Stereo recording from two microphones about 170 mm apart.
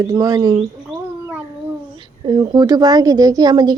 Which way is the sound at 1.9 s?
25° right (ahead or behind).